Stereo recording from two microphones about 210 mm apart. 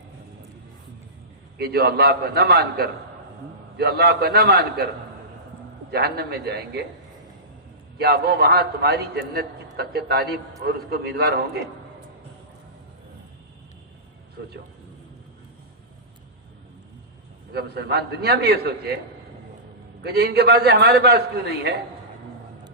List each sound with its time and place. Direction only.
1.5 s a man's voice: 50° right (ahead or behind)
5.9 s a man's voice: 50° right (ahead or behind)
7.9 s a man's voice: 50° right (ahead or behind)
17.5 s a man's voice: 50° right (ahead or behind)
20.0 s a man's voice: 50° right (ahead or behind)